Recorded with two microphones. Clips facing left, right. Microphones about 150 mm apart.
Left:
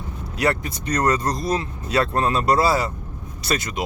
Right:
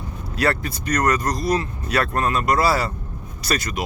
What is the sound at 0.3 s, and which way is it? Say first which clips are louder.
Speech: even; 20° left (ahead or behind).